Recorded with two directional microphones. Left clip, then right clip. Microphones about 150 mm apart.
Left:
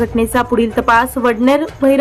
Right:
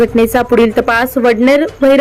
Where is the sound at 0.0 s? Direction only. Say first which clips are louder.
Right 5 dB; 20° right (ahead or behind).